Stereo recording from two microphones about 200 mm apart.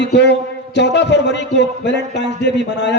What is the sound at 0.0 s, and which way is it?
A man's voice, 60° left (ahead or behind).